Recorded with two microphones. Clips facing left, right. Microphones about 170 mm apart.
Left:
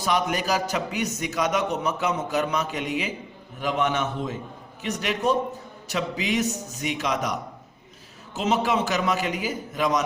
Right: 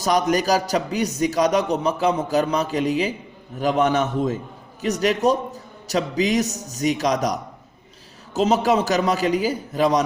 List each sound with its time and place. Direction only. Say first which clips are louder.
0.0 s a man's voice: right 5 dB; 40° right (ahead or behind)